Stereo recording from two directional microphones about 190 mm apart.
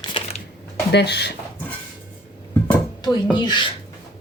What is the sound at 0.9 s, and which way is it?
Speech, 60° left (ahead or behind).